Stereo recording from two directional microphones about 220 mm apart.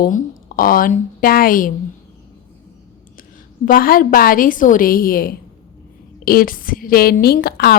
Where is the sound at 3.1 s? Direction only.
40° left (ahead or behind).